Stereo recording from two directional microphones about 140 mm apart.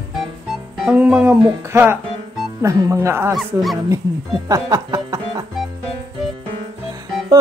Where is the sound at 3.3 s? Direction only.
Centre (ahead or behind).